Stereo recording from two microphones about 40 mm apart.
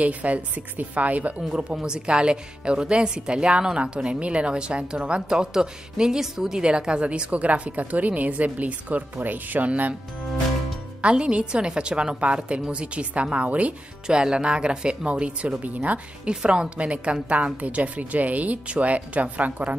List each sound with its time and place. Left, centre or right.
0.0 s a woman's voice: right
1.5 s a woman's voice: right
6.6 s a woman's voice: right
11.0 s a woman's voice: right
14.0 s a woman's voice: right
16.3 s a woman's voice: right